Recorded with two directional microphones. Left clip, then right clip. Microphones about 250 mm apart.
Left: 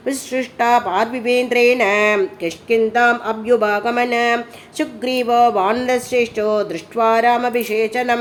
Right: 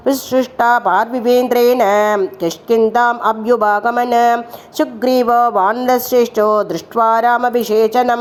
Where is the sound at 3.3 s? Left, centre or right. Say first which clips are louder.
Right 3 dB; centre.